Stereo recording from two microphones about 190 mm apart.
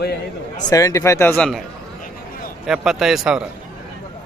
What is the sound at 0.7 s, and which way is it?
Mantra, 15° left (ahead or behind).